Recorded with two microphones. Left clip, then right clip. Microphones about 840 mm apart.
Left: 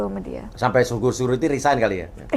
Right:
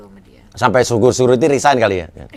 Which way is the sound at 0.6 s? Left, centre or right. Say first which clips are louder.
Right 7 dB; right.